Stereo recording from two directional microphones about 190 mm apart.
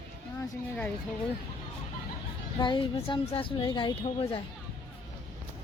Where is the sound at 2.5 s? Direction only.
25° left (ahead or behind).